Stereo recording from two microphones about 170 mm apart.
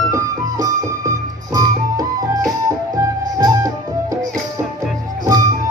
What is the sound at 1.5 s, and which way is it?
Music, 20° right (ahead or behind).